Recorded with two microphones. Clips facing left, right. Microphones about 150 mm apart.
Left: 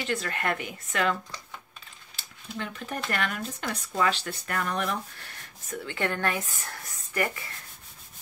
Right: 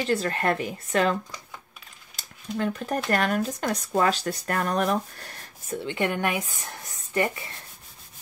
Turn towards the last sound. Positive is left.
turn(degrees=-25)  # may be behind; listen again after turning